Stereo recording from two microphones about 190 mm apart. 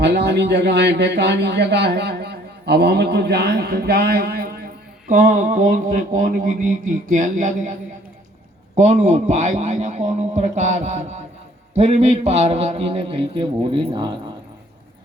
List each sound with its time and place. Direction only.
0.0 s a man's voice: 65° right (ahead or behind)
5.0 s mantra: 45° right (ahead or behind); by 14.1 s 25° right (ahead or behind)